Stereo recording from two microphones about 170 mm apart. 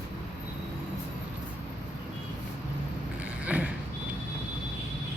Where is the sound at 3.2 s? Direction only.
10° right (ahead or behind).